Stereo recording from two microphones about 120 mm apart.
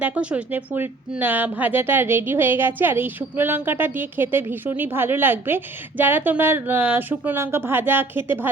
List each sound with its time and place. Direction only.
0.0 s a woman's voice: 10° right (ahead or behind)